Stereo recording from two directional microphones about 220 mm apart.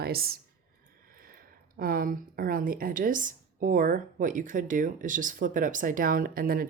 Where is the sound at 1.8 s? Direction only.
40° right (ahead or behind).